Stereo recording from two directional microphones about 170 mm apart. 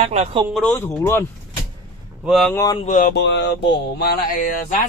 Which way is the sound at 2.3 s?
Centre (ahead or behind).